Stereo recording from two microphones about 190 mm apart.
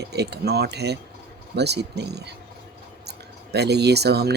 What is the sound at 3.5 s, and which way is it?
Speech, 60° right (ahead or behind).